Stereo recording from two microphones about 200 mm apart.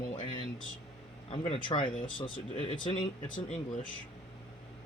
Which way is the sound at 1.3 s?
25° left (ahead or behind).